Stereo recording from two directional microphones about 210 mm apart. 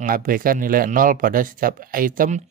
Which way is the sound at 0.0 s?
40° right (ahead or behind).